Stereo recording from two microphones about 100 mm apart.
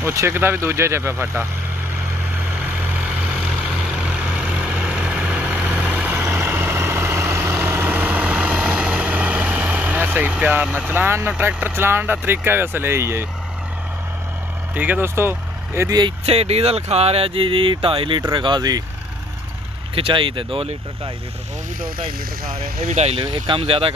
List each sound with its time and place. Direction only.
0.0 s speech: 30° right (ahead or behind)
2.6 s vehicle: 15° right (ahead or behind)
6.1 s vehicle: 25° right (ahead or behind)
11.3 s speech: 20° right (ahead or behind)
14.8 s speech: 20° right (ahead or behind)
16.3 s speech: 90° right; by 18.8 s 45° right (ahead or behind)
20.0 s speech: 60° right (ahead or behind)
22.8 s speech: 75° right (ahead or behind)
23.2 s speech: 50° right (ahead or behind)
23.6 s speech: 65° right (ahead or behind)